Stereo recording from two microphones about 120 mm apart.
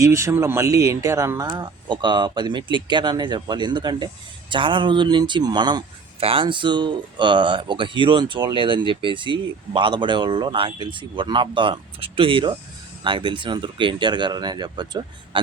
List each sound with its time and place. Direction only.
0.0 s speech: 25° right (ahead or behind)
6.1 s speech: 50° right (ahead or behind)